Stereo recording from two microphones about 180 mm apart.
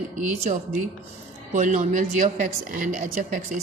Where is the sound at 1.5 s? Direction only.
45° right (ahead or behind).